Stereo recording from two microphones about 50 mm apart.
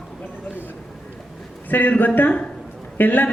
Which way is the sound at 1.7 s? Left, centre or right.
Left.